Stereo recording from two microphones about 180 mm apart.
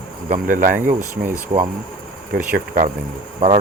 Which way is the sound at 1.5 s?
30° right (ahead or behind).